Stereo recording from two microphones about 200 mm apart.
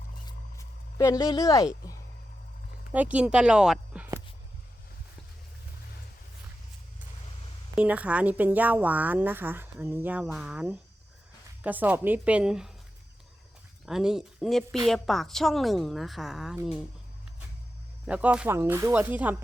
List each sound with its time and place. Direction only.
0.3 s a sound: 15° left (ahead or behind)
2.9 s speech: 5° right (ahead or behind)
7.8 s a woman's voice: 5° right (ahead or behind)
13.8 s a woman's voice: centre (ahead or behind)
18.0 s a woman's voice: 5° right (ahead or behind)